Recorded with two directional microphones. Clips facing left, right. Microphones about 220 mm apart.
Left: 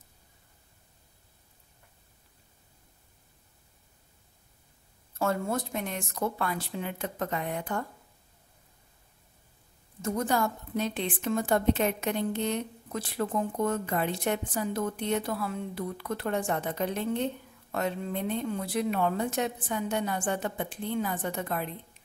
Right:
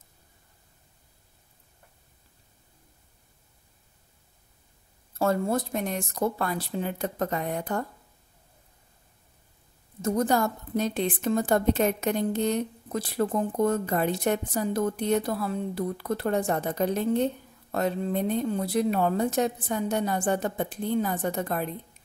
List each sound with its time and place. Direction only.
5.2 s a woman's voice: 35° right (ahead or behind)
10.0 s a woman's voice: 40° right (ahead or behind)